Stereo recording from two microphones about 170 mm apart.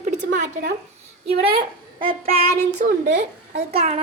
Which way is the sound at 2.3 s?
45° right (ahead or behind).